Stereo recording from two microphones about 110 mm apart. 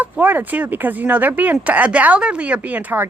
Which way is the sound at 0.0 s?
15° right (ahead or behind).